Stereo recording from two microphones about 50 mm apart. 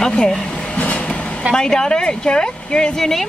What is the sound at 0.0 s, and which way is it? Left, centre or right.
Speech, centre.